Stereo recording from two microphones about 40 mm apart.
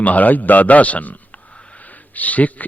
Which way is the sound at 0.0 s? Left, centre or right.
Left.